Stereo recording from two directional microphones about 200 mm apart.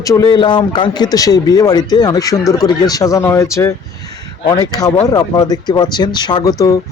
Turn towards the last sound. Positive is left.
turn(degrees=15)  # may be behind; listen again after turning